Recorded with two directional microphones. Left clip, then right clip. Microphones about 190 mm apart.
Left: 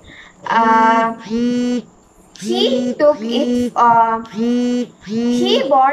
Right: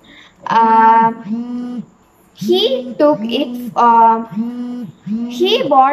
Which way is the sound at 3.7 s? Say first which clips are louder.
Right 3 dB; 10° right (ahead or behind).